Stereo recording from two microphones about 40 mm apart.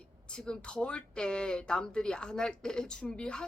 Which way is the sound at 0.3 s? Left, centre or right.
Left.